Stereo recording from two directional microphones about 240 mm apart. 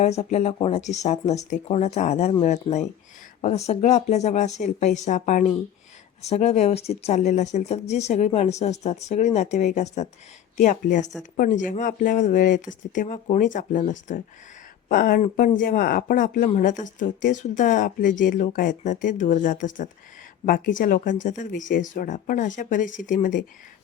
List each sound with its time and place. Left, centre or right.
0.0 s speech: left